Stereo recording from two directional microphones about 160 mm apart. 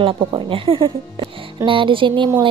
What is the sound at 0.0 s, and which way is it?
Speech, 30° right (ahead or behind).